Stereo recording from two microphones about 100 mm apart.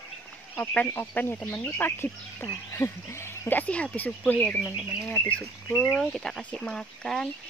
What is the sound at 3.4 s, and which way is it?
Speech, 15° left (ahead or behind).